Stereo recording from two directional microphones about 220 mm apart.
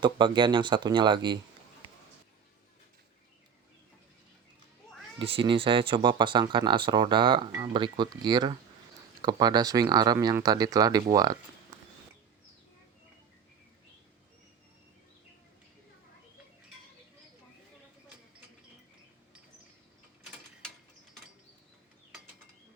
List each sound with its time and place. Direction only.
0.0 s speech: 20° right (ahead or behind)
5.2 s speech: 25° right (ahead or behind)
11.7 s walk: 15° right (ahead or behind)